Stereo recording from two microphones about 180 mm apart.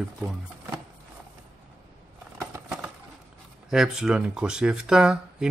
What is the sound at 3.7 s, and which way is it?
Speech, 5° right (ahead or behind).